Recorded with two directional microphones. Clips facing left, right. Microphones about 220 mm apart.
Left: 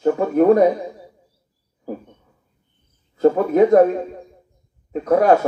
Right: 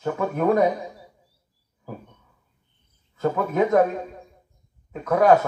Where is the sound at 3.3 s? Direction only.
35° left (ahead or behind).